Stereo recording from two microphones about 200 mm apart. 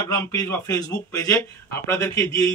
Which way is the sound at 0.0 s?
20° left (ahead or behind).